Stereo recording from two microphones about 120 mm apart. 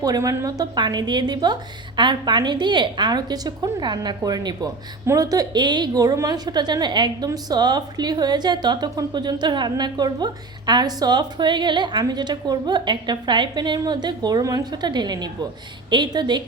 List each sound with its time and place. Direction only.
0.0 s a woman's voice: 30° right (ahead or behind)